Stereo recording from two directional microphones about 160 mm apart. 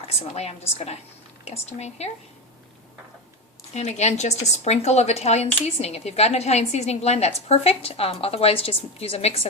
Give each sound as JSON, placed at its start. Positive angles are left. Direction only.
{"t": 0.2, "sound": "a woman's voice", "side_deg": 40}
{"t": 3.8, "sound": "a woman's voice", "side_deg": 45}